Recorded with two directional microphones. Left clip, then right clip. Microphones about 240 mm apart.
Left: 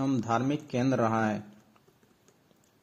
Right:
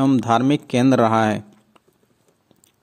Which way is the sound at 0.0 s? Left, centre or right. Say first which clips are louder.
Right 11 dB; right.